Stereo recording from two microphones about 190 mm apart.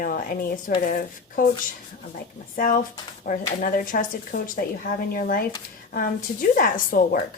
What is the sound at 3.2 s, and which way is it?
A woman's voice, 45° left (ahead or behind).